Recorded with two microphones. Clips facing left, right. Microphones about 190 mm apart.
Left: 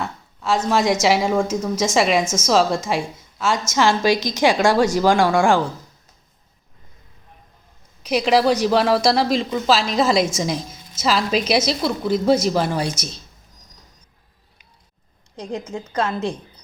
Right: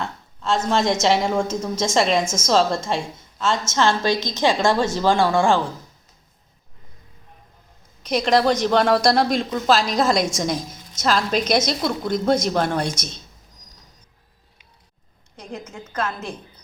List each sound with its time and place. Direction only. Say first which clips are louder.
0.0 s a woman's voice: left 1 dB; 10° left (ahead or behind)
4.1 s a woman's voice: left 3 dB; 20° right (ahead or behind)
4.4 s a woman's voice: left 2 dB; 10° left (ahead or behind)
8.0 s a woman's voice: left 1 dB; 5° left (ahead or behind)
16.0 s a woman's voice: left 5 dB; 30° left (ahead or behind)